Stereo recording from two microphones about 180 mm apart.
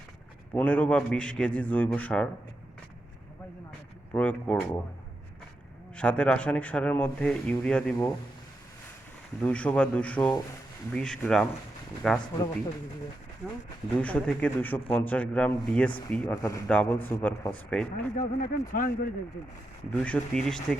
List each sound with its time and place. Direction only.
0.5 s speech: 10° left (ahead or behind)
4.1 s speech: 10° left (ahead or behind)
6.0 s speech: 5° left (ahead or behind)
9.4 s speech: 5° left (ahead or behind)
14.0 s speech: 5° left (ahead or behind)
17.9 s speech: 50° left (ahead or behind)
19.9 s speech: 5° left (ahead or behind)